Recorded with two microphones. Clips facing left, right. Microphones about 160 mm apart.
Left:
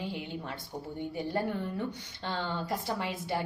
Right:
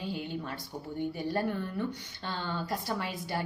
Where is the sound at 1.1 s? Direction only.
20° left (ahead or behind).